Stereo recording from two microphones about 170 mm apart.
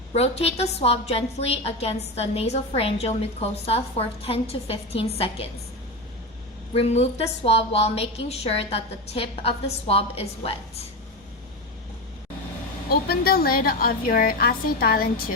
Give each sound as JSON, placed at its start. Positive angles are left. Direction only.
{"t": 0.1, "sound": "a woman's voice", "side_deg": 40}
{"t": 6.7, "sound": "a woman's voice", "side_deg": 40}
{"t": 12.9, "sound": "a woman's voice", "side_deg": 65}